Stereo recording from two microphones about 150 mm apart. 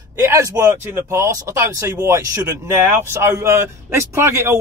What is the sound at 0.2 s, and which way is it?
Speech, 20° right (ahead or behind).